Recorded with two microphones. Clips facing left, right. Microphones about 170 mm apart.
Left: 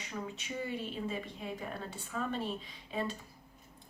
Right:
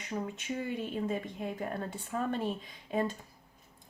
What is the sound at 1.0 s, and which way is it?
Speech, 50° right (ahead or behind).